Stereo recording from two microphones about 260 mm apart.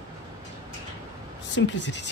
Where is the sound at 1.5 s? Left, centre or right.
Left.